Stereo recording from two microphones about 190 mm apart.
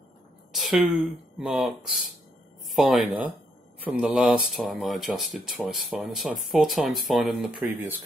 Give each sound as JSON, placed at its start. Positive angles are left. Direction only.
{"t": 0.5, "sound": "a woman's voice", "side_deg": 0}